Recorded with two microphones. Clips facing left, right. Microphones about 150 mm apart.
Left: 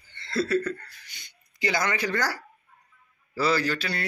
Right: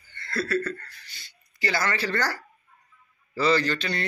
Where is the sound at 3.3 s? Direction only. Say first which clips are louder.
Right 2 dB; 5° left (ahead or behind).